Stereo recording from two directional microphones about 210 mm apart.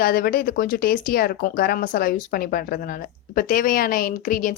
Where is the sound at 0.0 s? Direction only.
45° left (ahead or behind).